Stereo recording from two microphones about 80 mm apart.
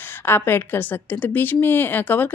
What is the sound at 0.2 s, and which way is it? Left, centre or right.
A woman's voice, left.